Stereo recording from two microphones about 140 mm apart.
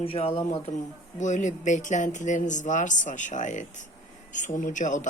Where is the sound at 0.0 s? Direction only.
40° left (ahead or behind).